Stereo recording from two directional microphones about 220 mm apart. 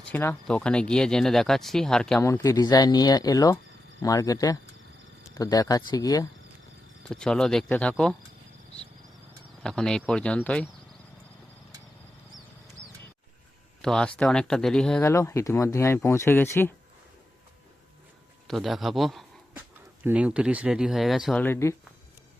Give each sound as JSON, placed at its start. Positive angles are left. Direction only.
{"t": 0.0, "sound": "speech", "side_deg": 10}
{"t": 2.3, "sound": "speech", "side_deg": 15}
{"t": 7.1, "sound": "speech", "side_deg": 5}
{"t": 9.6, "sound": "speech", "side_deg": 5}
{"t": 13.8, "sound": "speech", "side_deg": 0}
{"t": 18.4, "sound": "speech", "side_deg": 0}